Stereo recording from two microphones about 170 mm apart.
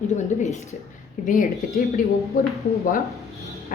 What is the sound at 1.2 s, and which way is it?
Speech, 50° left (ahead or behind).